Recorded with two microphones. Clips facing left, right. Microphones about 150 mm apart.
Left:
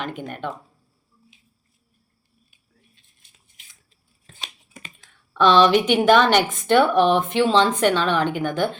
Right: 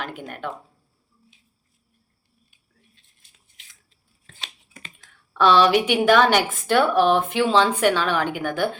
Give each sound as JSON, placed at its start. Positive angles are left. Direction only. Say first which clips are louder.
{"t": 0.0, "sound": "speech", "louder": "left 2 dB", "side_deg": -5}
{"t": 5.4, "sound": "a woman's voice", "louder": "left 1 dB", "side_deg": -10}